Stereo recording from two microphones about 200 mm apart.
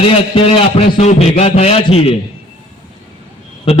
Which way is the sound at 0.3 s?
30° left (ahead or behind).